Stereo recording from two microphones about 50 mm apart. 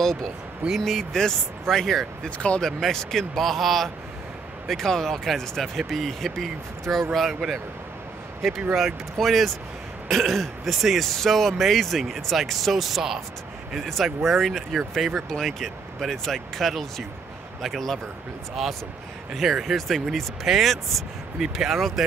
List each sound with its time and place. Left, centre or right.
0.7 s speech: centre
2.2 s speech: left
2.6 s speech: centre
7.3 s speech: centre